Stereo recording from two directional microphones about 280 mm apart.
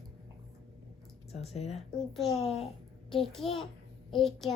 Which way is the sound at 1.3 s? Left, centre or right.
Left.